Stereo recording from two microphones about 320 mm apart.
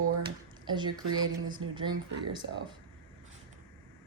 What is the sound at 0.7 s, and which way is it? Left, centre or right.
Speech, centre.